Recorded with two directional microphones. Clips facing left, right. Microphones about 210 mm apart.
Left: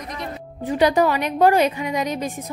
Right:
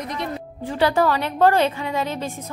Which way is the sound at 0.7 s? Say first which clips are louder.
Left 2 dB; 15° left (ahead or behind).